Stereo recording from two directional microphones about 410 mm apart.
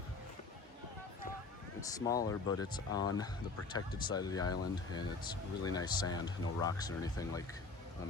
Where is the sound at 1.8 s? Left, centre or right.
Centre.